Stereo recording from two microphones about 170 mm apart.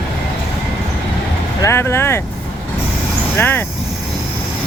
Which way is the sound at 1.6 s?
15° left (ahead or behind).